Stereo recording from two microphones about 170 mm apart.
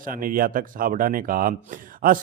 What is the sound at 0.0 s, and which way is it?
A man's voice, 55° right (ahead or behind).